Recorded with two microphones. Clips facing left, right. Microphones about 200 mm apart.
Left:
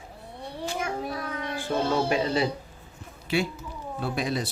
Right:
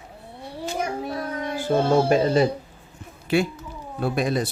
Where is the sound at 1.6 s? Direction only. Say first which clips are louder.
Right 6 dB; 45° right (ahead or behind).